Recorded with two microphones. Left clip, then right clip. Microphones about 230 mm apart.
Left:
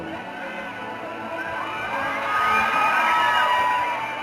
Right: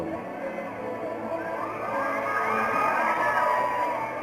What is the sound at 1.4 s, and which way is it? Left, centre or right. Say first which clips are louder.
Crowd: left 3 dB; centre.